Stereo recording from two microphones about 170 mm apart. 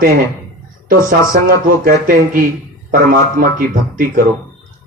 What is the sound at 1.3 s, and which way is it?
A man's voice, 55° right (ahead or behind).